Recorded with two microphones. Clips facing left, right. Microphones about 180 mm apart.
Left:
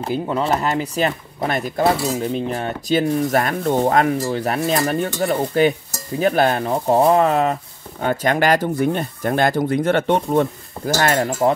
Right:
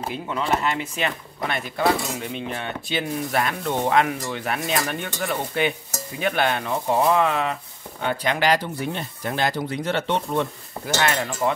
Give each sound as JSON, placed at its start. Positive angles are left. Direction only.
{"t": 0.1, "sound": "speech", "side_deg": 35}